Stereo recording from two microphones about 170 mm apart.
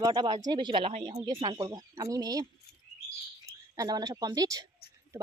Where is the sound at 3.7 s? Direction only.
20° right (ahead or behind).